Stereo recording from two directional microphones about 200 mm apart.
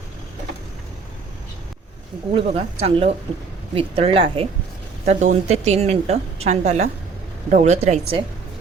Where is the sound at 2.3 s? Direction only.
30° right (ahead or behind).